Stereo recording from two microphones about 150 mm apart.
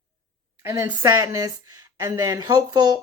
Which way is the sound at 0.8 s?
25° right (ahead or behind).